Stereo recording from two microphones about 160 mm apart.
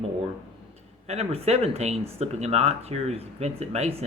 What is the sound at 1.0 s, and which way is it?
Speech, 40° right (ahead or behind).